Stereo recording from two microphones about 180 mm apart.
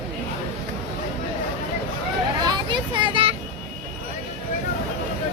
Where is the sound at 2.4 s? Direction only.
25° right (ahead or behind).